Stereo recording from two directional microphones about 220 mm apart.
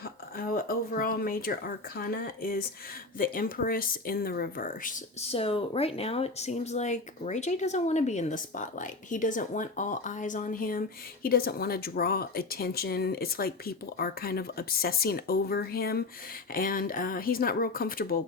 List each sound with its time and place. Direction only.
0.3 s speech: 40° left (ahead or behind)